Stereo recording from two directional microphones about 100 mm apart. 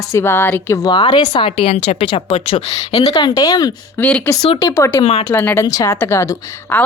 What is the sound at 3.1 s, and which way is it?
Speech, 45° left (ahead or behind).